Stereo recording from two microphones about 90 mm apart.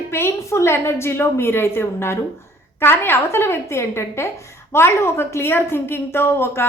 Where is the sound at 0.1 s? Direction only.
30° left (ahead or behind).